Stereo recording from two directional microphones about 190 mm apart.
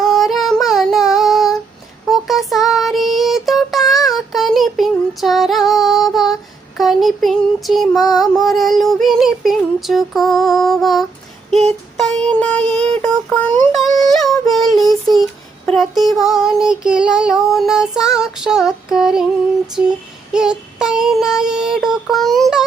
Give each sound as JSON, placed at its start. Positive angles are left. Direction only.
{"t": 0.0, "sound": "child singing", "side_deg": 0}
{"t": 6.7, "sound": "a sound", "side_deg": 0}
{"t": 7.9, "sound": "child singing", "side_deg": 20}
{"t": 8.4, "sound": "female singing", "side_deg": 0}
{"t": 11.9, "sound": "music", "side_deg": 5}
{"t": 13.0, "sound": "a sound", "side_deg": 5}
{"t": 14.0, "sound": "child singing", "side_deg": 0}
{"t": 20.3, "sound": "child singing", "side_deg": -5}